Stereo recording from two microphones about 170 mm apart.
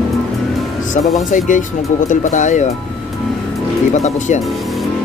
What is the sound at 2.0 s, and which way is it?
Speech, 45° left (ahead or behind).